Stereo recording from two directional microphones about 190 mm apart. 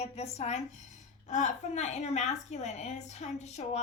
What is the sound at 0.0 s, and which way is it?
A woman's voice, 35° left (ahead or behind).